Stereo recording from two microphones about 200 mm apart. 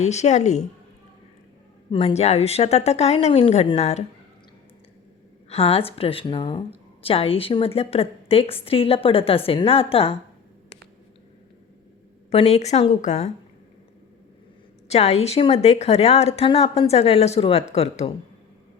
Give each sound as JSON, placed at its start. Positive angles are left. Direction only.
{"t": 0.0, "sound": "a woman's voice", "side_deg": 35}
{"t": 1.9, "sound": "a woman's voice", "side_deg": 30}
{"t": 5.5, "sound": "a woman's voice", "side_deg": 30}
{"t": 12.3, "sound": "a woman's voice", "side_deg": 30}
{"t": 14.8, "sound": "a woman's voice", "side_deg": 30}